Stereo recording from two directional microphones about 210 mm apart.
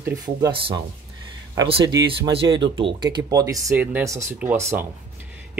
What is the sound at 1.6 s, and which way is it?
Speech, 25° right (ahead or behind).